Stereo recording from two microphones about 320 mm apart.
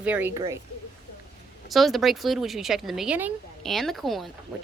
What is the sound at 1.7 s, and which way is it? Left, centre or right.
Speech, centre.